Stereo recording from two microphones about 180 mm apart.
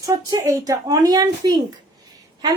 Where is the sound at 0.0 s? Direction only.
20° right (ahead or behind).